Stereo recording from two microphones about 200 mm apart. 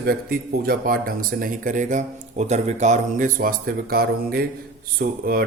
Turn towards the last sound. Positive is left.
turn(degrees=-45)  # may be behind; listen again after turning